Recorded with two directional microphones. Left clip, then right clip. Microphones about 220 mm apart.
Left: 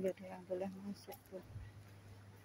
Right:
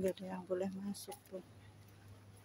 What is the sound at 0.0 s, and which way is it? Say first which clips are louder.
Speech: right 2 dB; 15° right (ahead or behind).